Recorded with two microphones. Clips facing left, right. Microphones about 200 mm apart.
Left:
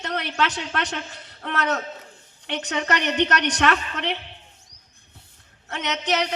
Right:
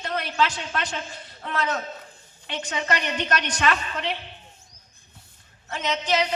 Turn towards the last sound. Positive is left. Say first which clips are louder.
# even
turn(degrees=75)  # may be behind; listen again after turning